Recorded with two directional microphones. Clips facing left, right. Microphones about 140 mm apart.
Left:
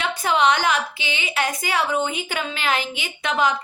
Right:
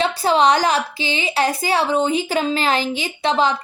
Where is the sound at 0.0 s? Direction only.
30° right (ahead or behind).